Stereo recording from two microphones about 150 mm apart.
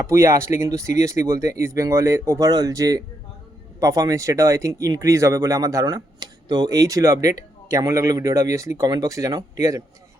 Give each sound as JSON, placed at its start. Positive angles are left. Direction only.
{"t": 0.1, "sound": "speech", "side_deg": -20}